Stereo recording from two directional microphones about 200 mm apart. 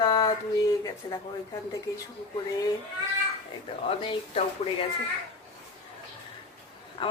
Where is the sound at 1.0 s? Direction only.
20° left (ahead or behind).